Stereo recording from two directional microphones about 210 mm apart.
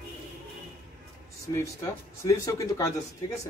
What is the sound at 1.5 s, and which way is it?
A man's voice, 15° left (ahead or behind).